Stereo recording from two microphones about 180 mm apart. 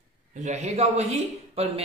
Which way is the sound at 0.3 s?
40° right (ahead or behind).